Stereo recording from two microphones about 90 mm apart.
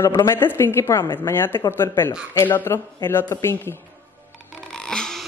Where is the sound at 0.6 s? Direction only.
30° left (ahead or behind).